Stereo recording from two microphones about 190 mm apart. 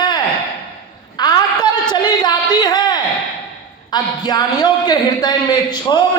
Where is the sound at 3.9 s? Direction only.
20° left (ahead or behind).